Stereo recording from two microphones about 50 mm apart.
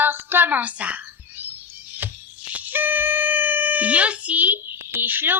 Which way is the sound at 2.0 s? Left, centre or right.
Right.